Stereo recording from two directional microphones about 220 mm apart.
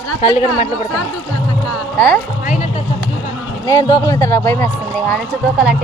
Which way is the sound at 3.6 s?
20° left (ahead or behind).